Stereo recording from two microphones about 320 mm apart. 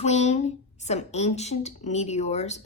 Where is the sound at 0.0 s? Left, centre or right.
Left.